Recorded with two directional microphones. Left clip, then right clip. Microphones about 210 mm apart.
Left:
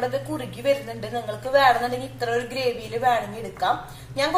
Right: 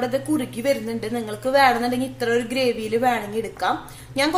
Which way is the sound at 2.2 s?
50° right (ahead or behind).